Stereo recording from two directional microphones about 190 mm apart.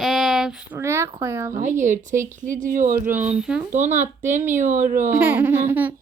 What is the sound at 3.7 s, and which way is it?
A child's voice, 40° right (ahead or behind).